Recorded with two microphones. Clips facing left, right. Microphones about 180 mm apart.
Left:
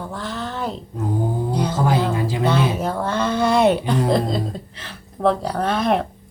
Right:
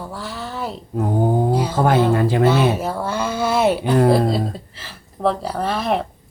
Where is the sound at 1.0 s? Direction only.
60° right (ahead or behind).